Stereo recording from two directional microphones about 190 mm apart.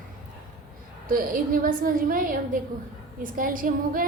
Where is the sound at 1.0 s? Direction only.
50° right (ahead or behind).